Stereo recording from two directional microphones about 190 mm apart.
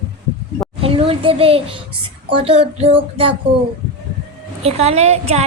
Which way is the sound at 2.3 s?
30° right (ahead or behind).